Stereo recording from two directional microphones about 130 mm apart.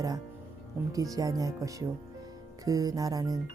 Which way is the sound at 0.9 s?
25° right (ahead or behind).